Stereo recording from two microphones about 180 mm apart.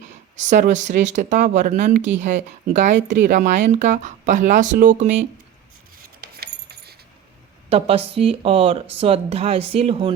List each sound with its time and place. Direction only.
0.3 s speech: 45° right (ahead or behind)
2.0 s speech: 80° right
2.2 s speech: 40° right (ahead or behind)
6.2 s keys jangling: 60° right (ahead or behind)
7.7 s speech: 35° right (ahead or behind)